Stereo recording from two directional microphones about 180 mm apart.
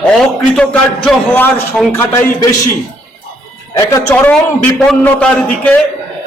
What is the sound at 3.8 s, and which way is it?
Speech, 15° left (ahead or behind).